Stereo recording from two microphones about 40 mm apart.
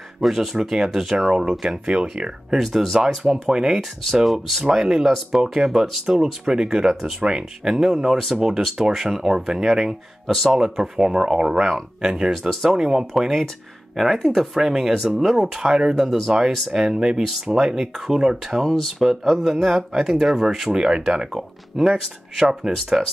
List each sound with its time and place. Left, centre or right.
0.2 s speech: centre
1.9 s speech: right
2.5 s speech: centre
3.5 s speech: centre
4.2 s speech: centre
4.6 s speech: centre
7.2 s speech: centre
18.6 s speech: centre
21.3 s speech: centre
22.4 s speech: centre